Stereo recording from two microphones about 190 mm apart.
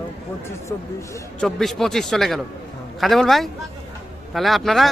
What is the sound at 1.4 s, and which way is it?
Speech, centre (ahead or behind).